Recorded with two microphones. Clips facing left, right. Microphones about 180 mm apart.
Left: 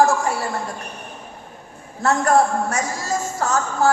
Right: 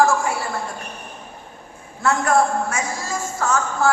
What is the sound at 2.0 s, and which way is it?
A man's voice, 40° left (ahead or behind).